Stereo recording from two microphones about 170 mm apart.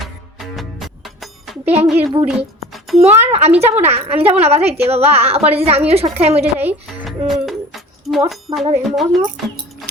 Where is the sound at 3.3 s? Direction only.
40° right (ahead or behind).